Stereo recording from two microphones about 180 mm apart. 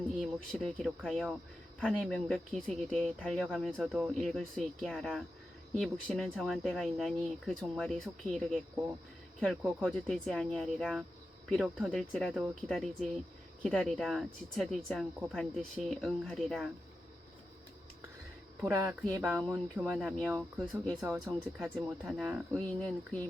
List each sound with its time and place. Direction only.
0.2 s speech: centre (ahead or behind)
18.6 s speech: 15° right (ahead or behind)
18.9 s speech: 5° right (ahead or behind)
20.8 s speech: centre (ahead or behind)